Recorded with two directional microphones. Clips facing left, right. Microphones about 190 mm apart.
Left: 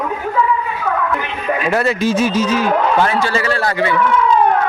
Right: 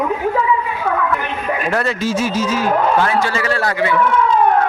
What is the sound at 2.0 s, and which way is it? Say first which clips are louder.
A man's voice: left 3 dB; 20° left (ahead or behind).